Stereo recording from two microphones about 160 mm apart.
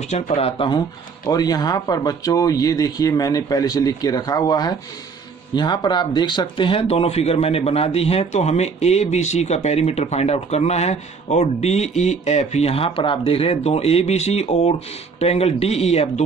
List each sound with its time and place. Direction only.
0.1 s speech: 40° left (ahead or behind)